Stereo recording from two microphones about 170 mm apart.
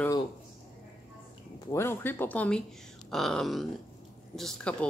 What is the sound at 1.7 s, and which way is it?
Speech, 15° left (ahead or behind).